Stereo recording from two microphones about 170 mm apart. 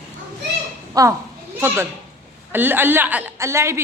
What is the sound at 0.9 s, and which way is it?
Speech, 20° right (ahead or behind).